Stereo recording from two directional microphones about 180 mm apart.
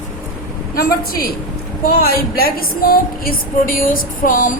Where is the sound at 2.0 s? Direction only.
55° left (ahead or behind).